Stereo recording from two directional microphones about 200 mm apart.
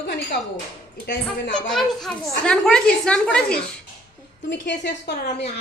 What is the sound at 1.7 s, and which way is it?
A woman's voice, centre (ahead or behind).